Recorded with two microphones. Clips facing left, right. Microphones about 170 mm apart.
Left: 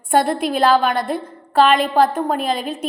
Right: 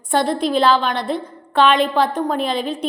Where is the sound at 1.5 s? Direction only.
Centre (ahead or behind).